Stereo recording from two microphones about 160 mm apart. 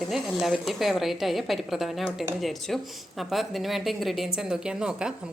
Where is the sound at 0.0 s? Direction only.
Centre (ahead or behind).